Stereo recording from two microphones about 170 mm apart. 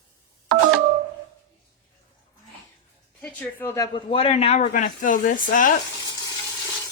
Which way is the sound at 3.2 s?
10° left (ahead or behind).